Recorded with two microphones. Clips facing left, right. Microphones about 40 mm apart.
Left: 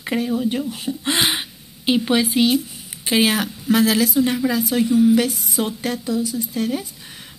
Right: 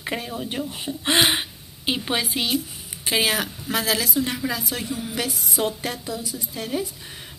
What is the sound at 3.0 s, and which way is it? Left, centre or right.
A woman's voice, centre.